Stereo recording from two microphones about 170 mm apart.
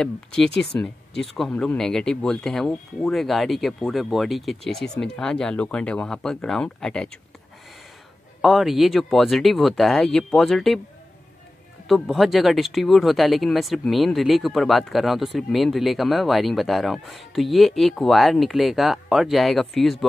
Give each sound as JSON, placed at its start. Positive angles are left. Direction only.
{"t": 0.0, "sound": "speech", "side_deg": 5}
{"t": 0.7, "sound": "speech", "side_deg": 15}
{"t": 1.2, "sound": "speech", "side_deg": 0}
{"t": 8.4, "sound": "speech", "side_deg": 0}
{"t": 11.9, "sound": "speech", "side_deg": 0}